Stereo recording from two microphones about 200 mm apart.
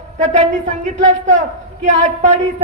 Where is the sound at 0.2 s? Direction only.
40° right (ahead or behind).